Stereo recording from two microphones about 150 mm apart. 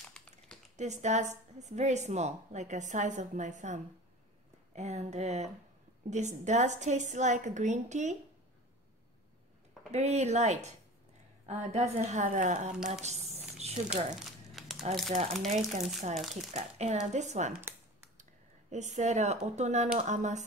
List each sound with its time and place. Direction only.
0.1 s a sound: 5° left (ahead or behind)
0.7 s a woman's voice: 50° right (ahead or behind)
9.8 s a woman's voice: 50° right (ahead or behind)
12.7 s speech: 5° right (ahead or behind)
13.0 s squish: 45° right (ahead or behind)
14.5 s crumpling: centre (ahead or behind)
15.4 s a woman's voice: 50° right (ahead or behind)
16.2 s speech: centre (ahead or behind)
16.5 s a woman's voice: 50° right (ahead or behind)
17.5 s a sound: 15° right (ahead or behind)
18.7 s a woman's voice: 50° right (ahead or behind)